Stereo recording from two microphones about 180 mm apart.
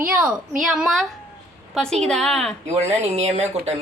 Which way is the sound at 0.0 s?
5° right (ahead or behind).